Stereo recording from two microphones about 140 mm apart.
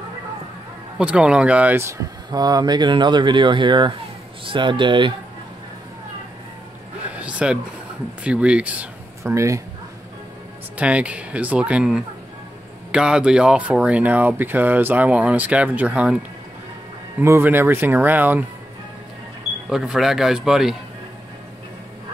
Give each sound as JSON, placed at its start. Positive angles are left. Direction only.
{"t": 0.9, "sound": "speech", "side_deg": -5}
{"t": 7.1, "sound": "a sound", "side_deg": -10}
{"t": 8.2, "sound": "speech", "side_deg": -10}
{"t": 9.2, "sound": "speech", "side_deg": -20}
{"t": 10.8, "sound": "speech", "side_deg": -10}
{"t": 19.7, "sound": "a man's voice", "side_deg": -5}